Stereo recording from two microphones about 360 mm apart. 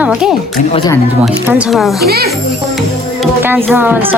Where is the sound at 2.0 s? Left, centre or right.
Right.